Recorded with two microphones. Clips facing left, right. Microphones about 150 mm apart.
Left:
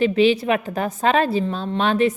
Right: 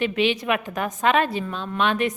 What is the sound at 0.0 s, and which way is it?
A woman's voice, 35° left (ahead or behind).